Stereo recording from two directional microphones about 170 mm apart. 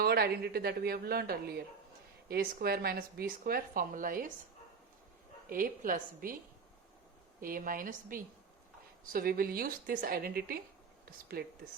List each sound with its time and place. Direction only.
0.0 s a woman's voice: 70° right (ahead or behind); by 4.3 s 55° right (ahead or behind)
5.5 s speech: 55° right (ahead or behind)
7.4 s a woman's voice: 55° right (ahead or behind)